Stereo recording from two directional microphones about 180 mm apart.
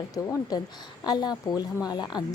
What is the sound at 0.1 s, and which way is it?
Speech, 20° left (ahead or behind).